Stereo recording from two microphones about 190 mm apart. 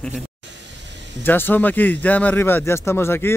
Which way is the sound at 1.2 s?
10° left (ahead or behind).